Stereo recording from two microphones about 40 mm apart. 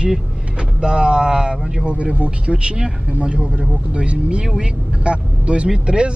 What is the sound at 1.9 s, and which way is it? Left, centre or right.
A woman's voice, right.